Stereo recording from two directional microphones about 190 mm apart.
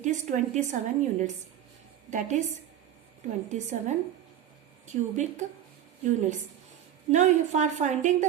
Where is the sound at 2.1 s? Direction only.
40° right (ahead or behind).